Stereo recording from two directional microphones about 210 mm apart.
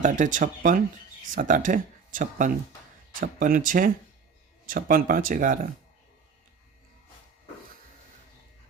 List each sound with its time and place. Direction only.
0.0 s speech: 35° right (ahead or behind)